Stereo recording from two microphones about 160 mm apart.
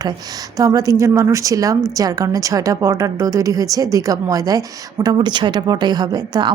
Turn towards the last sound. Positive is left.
turn(degrees=-25)  # may be behind; listen again after turning